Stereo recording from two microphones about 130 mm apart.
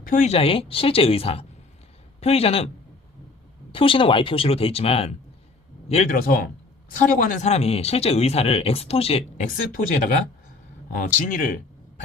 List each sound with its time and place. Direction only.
0.0 s a woman's voice: 90° left
0.3 s speech: 50° left (ahead or behind)
3.7 s speech: 45° left (ahead or behind)
5.9 s speech: 75° left (ahead or behind)
7.4 s speech: 55° left (ahead or behind)
9.4 s speech: 90° left